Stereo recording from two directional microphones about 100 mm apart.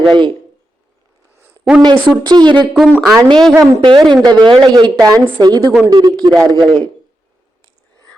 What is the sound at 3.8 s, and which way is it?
Speech, 55° right (ahead or behind).